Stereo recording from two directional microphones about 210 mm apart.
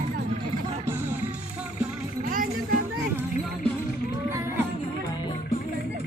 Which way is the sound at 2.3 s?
40° right (ahead or behind).